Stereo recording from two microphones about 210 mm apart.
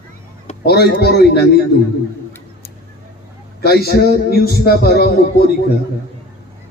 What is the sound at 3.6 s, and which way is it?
A man's voice, 50° left (ahead or behind).